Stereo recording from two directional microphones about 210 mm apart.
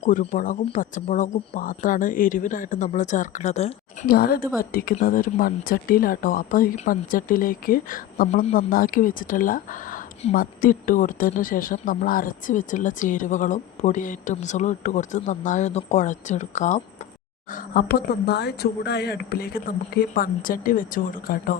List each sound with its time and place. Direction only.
0.0 s a woman's voice: 35° left (ahead or behind)
4.0 s a woman's voice: 45° left (ahead or behind)
17.5 s speech: 45° left (ahead or behind)